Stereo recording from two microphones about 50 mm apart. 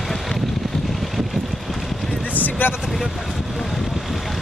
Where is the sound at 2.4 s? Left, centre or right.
Left.